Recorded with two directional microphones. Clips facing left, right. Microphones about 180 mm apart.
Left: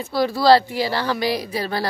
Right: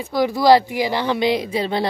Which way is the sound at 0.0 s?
15° right (ahead or behind).